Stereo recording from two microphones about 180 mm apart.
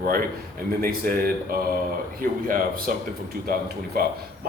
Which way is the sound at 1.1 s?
55° right (ahead or behind).